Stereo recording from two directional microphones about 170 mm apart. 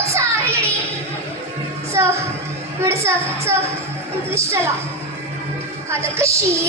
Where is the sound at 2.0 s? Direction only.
15° right (ahead or behind).